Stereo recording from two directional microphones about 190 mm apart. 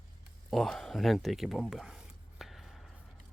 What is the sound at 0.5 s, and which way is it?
Speech, centre (ahead or behind).